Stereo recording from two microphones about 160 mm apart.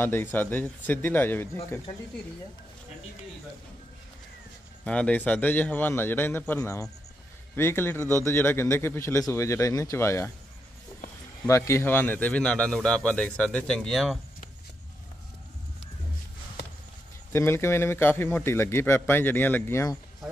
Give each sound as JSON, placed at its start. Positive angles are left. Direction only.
{"t": 0.0, "sound": "a man's voice", "side_deg": 15}
{"t": 4.8, "sound": "a man's voice", "side_deg": 5}
{"t": 11.4, "sound": "a man's voice", "side_deg": 20}
{"t": 17.3, "sound": "a man's voice", "side_deg": 15}